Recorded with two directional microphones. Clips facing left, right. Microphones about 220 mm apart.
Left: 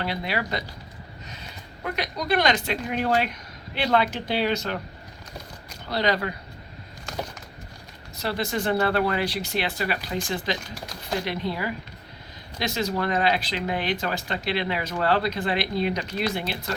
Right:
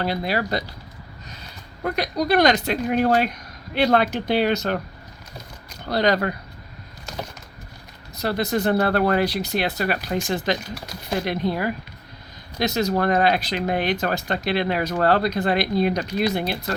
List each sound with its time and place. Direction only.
0.0 s speech: 40° right (ahead or behind)
1.8 s speech: 40° right (ahead or behind)
5.9 s speech: 45° right (ahead or behind)
8.2 s speech: 40° right (ahead or behind)